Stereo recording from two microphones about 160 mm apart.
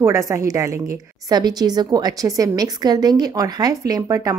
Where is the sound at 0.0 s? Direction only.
20° right (ahead or behind).